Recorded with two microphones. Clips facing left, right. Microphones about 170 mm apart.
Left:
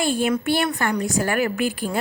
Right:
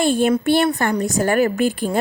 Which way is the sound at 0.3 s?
35° right (ahead or behind).